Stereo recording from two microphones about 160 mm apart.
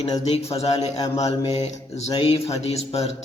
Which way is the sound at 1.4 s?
40° left (ahead or behind).